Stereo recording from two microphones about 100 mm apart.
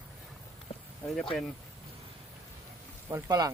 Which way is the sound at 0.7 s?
90° left.